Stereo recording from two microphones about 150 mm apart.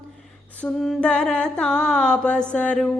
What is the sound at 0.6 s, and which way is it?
Mantra, centre (ahead or behind).